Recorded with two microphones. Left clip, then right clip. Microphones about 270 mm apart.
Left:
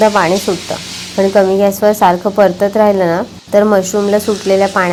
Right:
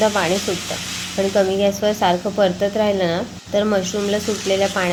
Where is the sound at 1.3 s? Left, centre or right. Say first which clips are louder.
Left 7 dB; left.